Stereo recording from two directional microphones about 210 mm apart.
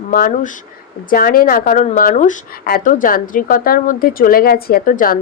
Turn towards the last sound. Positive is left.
turn(degrees=40)  # may be behind; listen again after turning